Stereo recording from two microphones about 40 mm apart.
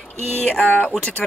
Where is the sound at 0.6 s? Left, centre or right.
Left.